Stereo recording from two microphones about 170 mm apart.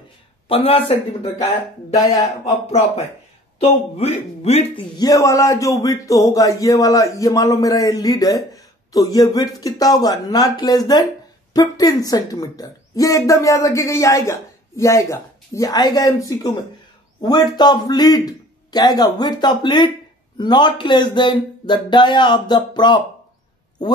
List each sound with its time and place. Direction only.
0.5 s speech: 35° left (ahead or behind)
2.0 s a woman's voice: 20° left (ahead or behind)
2.5 s speech: 40° left (ahead or behind)
4.9 s a woman's voice: 20° left (ahead or behind)